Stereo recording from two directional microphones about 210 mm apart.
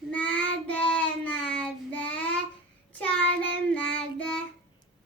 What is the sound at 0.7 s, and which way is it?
Child singing, 5° left (ahead or behind).